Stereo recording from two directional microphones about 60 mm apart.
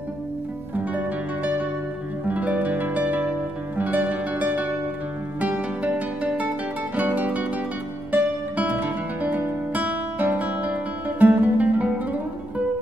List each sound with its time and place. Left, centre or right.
0.7 s music: right